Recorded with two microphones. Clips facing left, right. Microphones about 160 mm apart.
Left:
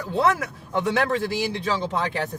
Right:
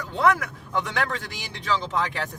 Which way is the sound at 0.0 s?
30° left (ahead or behind).